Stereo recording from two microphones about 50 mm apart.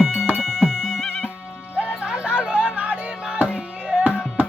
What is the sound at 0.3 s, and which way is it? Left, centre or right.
Music, centre.